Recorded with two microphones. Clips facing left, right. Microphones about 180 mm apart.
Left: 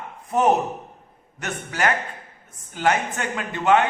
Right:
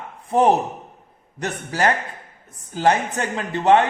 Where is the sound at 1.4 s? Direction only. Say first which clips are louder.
Right 3 dB; 35° right (ahead or behind).